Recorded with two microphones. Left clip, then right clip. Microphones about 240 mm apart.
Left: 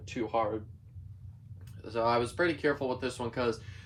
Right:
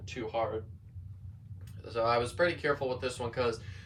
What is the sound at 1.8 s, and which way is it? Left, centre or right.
Speech, centre.